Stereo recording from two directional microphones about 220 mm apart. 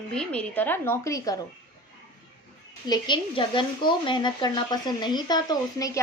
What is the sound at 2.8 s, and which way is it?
Speech, 20° left (ahead or behind).